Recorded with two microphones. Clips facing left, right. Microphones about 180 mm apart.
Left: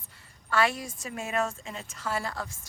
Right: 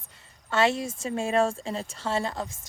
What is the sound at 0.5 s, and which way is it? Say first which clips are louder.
A woman's voice: right 3 dB; 25° right (ahead or behind).